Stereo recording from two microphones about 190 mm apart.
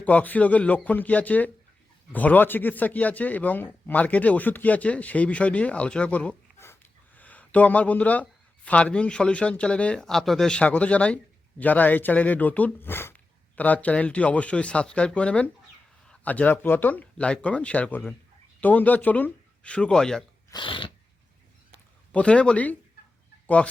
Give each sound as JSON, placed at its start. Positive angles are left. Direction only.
{"t": 0.0, "sound": "speech", "side_deg": 10}
{"t": 20.5, "sound": "a sound", "side_deg": 25}
{"t": 22.1, "sound": "speech", "side_deg": 5}